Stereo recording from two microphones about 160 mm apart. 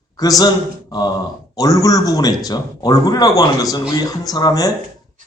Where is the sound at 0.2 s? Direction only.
25° left (ahead or behind).